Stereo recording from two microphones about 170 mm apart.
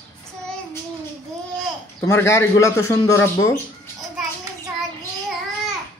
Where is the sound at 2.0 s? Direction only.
15° left (ahead or behind).